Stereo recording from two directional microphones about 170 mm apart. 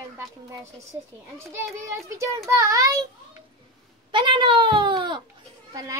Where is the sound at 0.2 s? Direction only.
20° right (ahead or behind).